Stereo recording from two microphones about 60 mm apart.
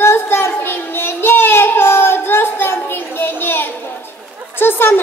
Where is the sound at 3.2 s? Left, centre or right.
Left.